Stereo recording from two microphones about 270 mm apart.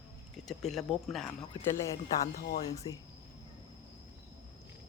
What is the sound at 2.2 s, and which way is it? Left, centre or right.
Speech, left.